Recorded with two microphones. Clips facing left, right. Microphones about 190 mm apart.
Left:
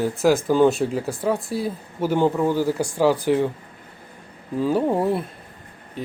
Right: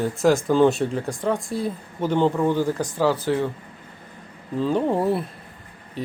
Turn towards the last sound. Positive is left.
turn(degrees=0)  # may be behind; listen again after turning